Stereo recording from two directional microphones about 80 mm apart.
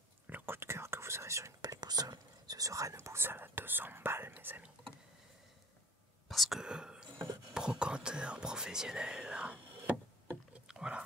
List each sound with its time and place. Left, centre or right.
0.3 s speech: right
6.2 s speech: centre
6.6 s speech: centre
10.7 s dog: centre